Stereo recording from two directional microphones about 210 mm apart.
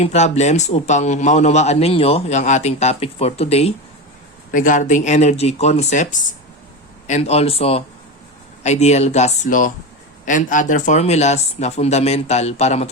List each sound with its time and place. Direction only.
0.0 s a man's voice: 30° left (ahead or behind)